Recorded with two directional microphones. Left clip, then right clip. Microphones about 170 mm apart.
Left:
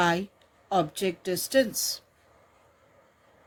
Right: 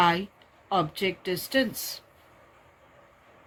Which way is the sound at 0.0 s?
65° left (ahead or behind).